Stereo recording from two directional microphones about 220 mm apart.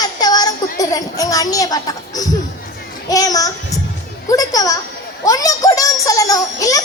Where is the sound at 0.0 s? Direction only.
15° left (ahead or behind).